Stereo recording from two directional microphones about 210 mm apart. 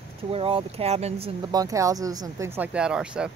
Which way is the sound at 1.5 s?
15° right (ahead or behind).